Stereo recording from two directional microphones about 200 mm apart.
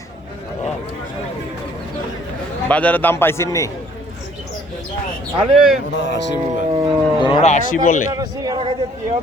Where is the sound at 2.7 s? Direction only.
10° left (ahead or behind).